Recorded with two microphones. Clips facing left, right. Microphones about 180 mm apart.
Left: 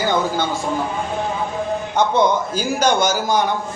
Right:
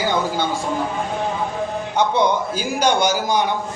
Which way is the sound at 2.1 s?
45° left (ahead or behind).